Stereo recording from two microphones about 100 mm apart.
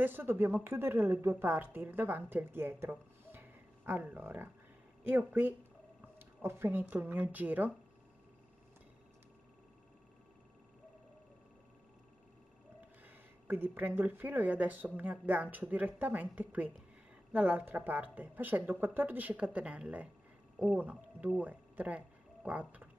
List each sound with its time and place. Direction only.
0.0 s a woman's voice: 20° right (ahead or behind)
13.0 s speech: 20° right (ahead or behind)
21.4 s a sound: 15° right (ahead or behind)